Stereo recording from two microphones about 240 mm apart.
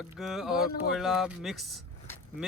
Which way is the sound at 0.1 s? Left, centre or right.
Centre.